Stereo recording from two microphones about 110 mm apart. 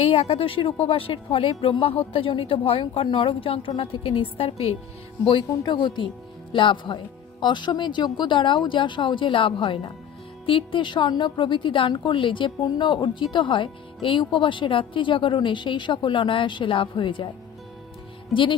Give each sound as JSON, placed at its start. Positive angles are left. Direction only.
{"t": 0.0, "sound": "a woman's voice", "side_deg": 65}
{"t": 5.2, "sound": "a woman's voice", "side_deg": 50}